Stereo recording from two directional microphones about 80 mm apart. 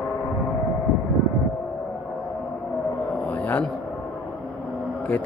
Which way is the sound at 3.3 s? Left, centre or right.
Centre.